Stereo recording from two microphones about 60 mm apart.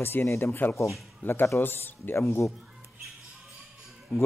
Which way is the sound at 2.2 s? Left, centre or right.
Left.